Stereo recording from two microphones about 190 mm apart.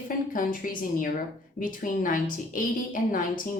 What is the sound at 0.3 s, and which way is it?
A woman's voice, 45° left (ahead or behind).